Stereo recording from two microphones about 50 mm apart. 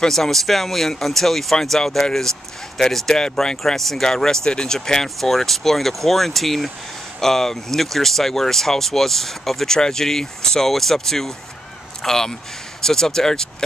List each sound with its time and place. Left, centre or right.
0.0 s speech: centre